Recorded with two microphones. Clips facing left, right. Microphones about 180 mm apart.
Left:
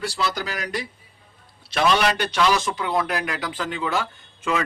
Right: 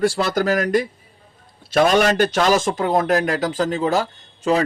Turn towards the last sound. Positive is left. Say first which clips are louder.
# right 6 dB
turn(degrees=-40)  # may be behind; listen again after turning